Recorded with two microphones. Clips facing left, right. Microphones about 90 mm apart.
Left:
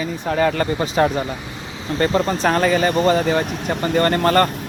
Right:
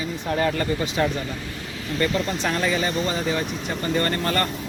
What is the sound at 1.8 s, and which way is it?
Speech, 30° left (ahead or behind).